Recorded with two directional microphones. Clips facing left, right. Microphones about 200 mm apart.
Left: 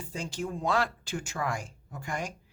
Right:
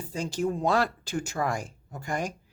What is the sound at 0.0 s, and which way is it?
Speech, 35° right (ahead or behind).